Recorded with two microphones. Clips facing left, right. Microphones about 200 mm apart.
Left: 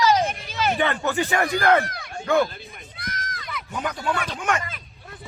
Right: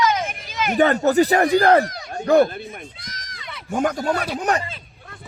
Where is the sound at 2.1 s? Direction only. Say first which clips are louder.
Right 6 dB; 40° right (ahead or behind).